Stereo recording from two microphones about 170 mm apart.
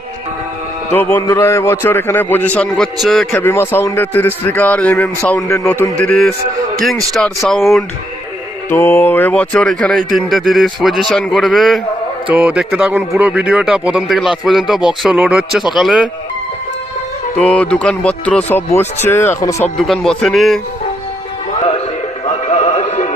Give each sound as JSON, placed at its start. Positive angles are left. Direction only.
{"t": 0.9, "sound": "a man's voice", "side_deg": 15}
{"t": 3.4, "sound": "a man's voice", "side_deg": 15}
{"t": 8.7, "sound": "a man's voice", "side_deg": 15}
{"t": 17.3, "sound": "a man's voice", "side_deg": 5}
{"t": 19.8, "sound": "speech", "side_deg": 0}
{"t": 22.3, "sound": "music", "side_deg": 40}